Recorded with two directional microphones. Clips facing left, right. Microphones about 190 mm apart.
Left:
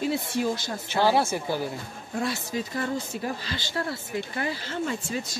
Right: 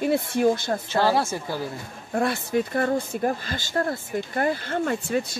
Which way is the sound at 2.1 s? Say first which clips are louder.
Right 6 dB; 55° right (ahead or behind).